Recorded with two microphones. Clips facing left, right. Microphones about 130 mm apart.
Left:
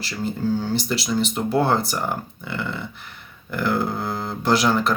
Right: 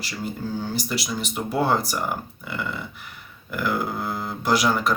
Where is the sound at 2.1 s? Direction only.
30° left (ahead or behind).